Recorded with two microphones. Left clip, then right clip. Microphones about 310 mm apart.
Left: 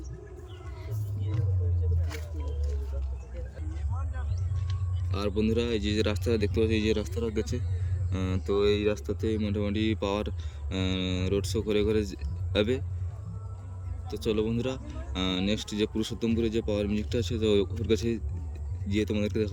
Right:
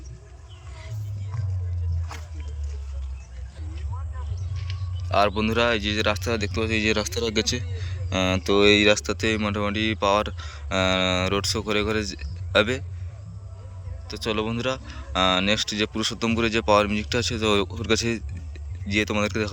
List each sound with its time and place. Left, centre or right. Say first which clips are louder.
5.0 s speech: right 9 dB; centre
7.2 s speech: right 7 dB; right
9.2 s speech: right 3 dB; centre
14.1 s speech: right 2 dB; centre